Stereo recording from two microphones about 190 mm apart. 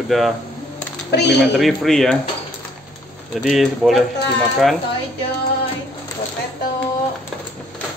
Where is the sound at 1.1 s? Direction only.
65° left (ahead or behind).